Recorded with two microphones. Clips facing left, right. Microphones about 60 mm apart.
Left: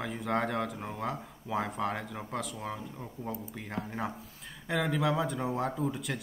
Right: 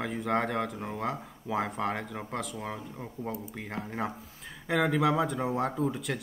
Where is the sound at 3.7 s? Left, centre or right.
Centre.